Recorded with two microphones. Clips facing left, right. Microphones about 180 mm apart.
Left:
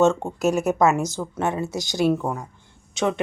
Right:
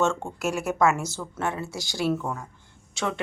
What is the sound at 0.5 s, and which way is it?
A woman's voice, 20° left (ahead or behind).